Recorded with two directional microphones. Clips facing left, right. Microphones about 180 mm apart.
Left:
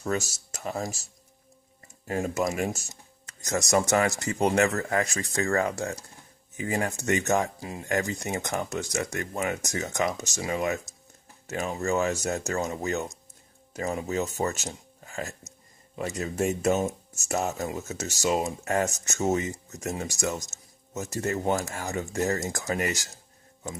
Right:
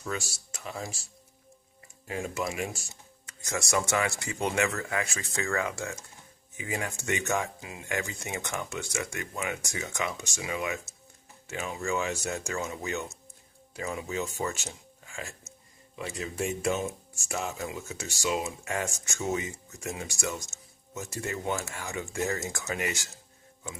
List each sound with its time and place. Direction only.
0.0 s speech: 45° left (ahead or behind)